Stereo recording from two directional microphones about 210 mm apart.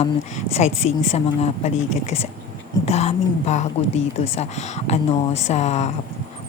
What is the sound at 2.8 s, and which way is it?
Speech, 30° left (ahead or behind).